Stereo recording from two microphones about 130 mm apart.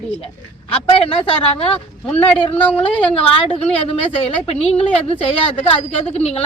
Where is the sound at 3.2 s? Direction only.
45° left (ahead or behind).